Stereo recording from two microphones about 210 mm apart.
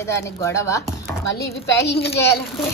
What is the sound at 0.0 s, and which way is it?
Speech, 15° left (ahead or behind).